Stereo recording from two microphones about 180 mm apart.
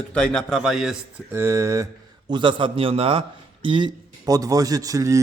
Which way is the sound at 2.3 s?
25° right (ahead or behind).